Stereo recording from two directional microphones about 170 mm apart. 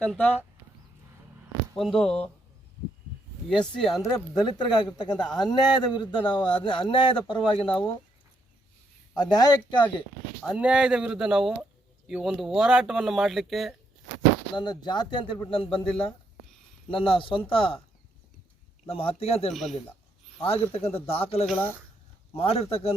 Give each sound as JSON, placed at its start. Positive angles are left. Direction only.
{"t": 0.0, "sound": "speech", "side_deg": 5}
{"t": 1.7, "sound": "speech", "side_deg": 0}
{"t": 4.0, "sound": "speech", "side_deg": 25}
{"t": 9.1, "sound": "speech", "side_deg": 25}
{"t": 10.4, "sound": "speech", "side_deg": -5}
{"t": 14.5, "sound": "speech", "side_deg": 25}
{"t": 16.9, "sound": "speech", "side_deg": 30}
{"t": 18.9, "sound": "speech", "side_deg": 35}